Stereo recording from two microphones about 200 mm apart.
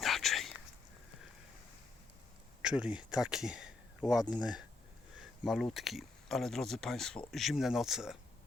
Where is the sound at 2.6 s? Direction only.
5° right (ahead or behind).